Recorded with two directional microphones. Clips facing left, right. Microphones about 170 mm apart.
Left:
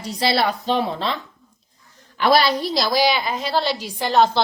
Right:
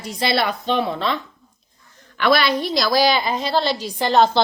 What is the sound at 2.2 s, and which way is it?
Speech, 35° left (ahead or behind).